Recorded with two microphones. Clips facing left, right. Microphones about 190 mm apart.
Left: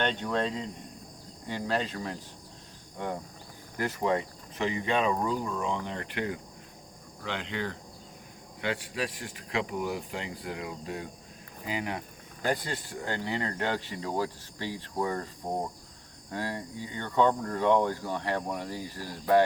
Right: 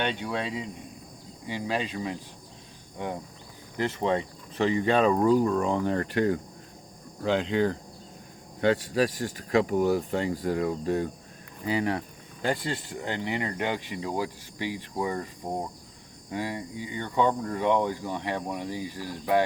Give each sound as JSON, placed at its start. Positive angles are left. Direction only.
{"t": 0.0, "sound": "speech", "side_deg": -10}
{"t": 3.8, "sound": "speech", "side_deg": -25}
{"t": 12.5, "sound": "speech", "side_deg": -25}
{"t": 16.3, "sound": "speech", "side_deg": -15}